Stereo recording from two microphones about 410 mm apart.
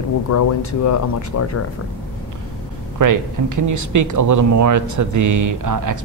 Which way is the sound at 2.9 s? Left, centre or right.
Right.